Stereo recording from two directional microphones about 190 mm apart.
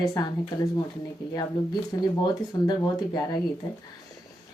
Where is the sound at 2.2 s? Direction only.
20° left (ahead or behind).